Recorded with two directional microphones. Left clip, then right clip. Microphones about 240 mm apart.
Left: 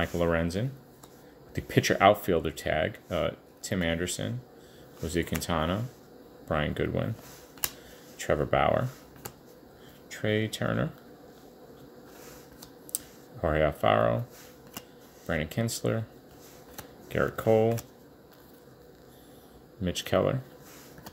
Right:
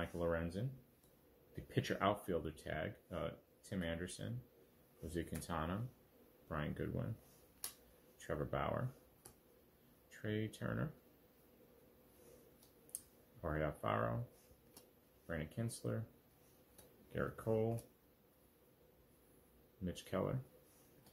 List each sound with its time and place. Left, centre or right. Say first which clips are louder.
0.0 s speech: left 13 dB; left
8.3 s speech: left 16 dB; left
13.4 s speech: left 16 dB; left
15.2 s speech: left 15 dB; left
17.1 s speech: left 16 dB; left
19.8 s speech: left 16 dB; left